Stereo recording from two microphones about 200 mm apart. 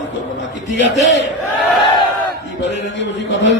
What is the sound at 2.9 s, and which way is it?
Speech, 65° left (ahead or behind).